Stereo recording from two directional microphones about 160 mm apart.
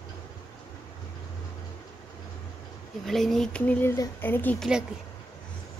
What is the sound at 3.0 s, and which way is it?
Speech, centre (ahead or behind).